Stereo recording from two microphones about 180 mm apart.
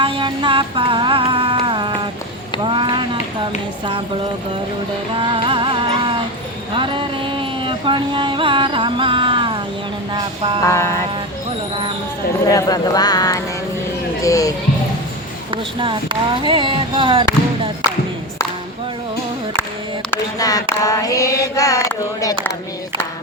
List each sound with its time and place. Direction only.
0.0 s music: 30° right (ahead or behind)
2.6 s a sound: 25° right (ahead or behind)
5.1 s music: 30° right (ahead or behind)
10.1 s a sound: 25° right (ahead or behind)
10.6 s music: 15° left (ahead or behind)
12.5 s speech: 20° left (ahead or behind)
16.4 s speech: 25° right (ahead or behind)
20.1 s a sound: 20° left (ahead or behind)
20.8 s speech: 20° left (ahead or behind)